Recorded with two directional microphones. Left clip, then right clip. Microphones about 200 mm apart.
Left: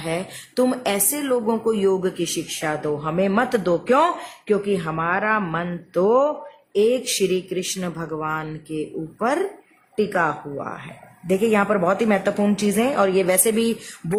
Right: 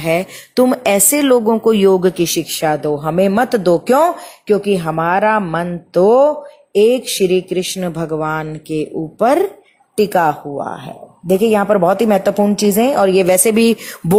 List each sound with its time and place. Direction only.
0.0 s speech: 30° right (ahead or behind)